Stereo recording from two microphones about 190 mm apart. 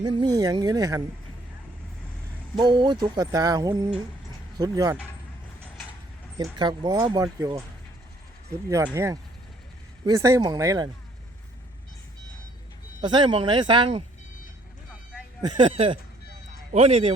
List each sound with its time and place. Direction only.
0.0 s speech: 25° right (ahead or behind)
2.6 s speech: 25° right (ahead or behind)
6.3 s speech: 25° right (ahead or behind)
8.7 s speech: 15° right (ahead or behind)
13.0 s speech: 25° right (ahead or behind)
15.4 s speech: 25° right (ahead or behind)